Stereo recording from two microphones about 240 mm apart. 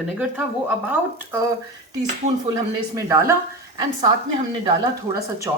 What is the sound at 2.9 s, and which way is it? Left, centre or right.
Speech, centre.